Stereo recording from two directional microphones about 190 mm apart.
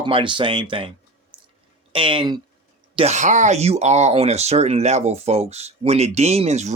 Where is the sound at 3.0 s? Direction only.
35° right (ahead or behind).